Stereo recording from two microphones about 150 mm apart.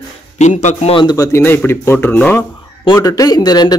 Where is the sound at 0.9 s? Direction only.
30° left (ahead or behind); by 2.4 s 15° left (ahead or behind).